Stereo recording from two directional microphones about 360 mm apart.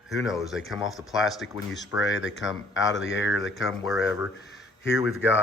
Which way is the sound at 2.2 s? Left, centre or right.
Left.